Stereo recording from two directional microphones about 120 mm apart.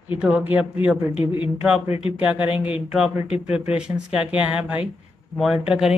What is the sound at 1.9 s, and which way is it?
Speech, 50° left (ahead or behind).